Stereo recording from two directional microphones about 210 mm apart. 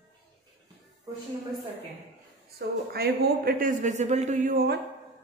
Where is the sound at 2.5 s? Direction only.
50° right (ahead or behind).